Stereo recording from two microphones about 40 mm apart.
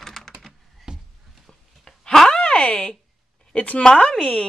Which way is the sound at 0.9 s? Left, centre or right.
Centre.